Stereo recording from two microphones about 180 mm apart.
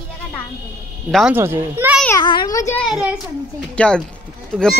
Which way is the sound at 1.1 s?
5° right (ahead or behind).